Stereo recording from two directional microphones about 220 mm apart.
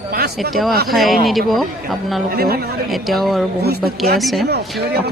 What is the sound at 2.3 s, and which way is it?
Speech, 45° right (ahead or behind).